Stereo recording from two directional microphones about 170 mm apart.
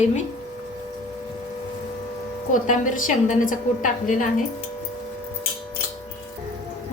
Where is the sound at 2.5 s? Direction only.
50° left (ahead or behind).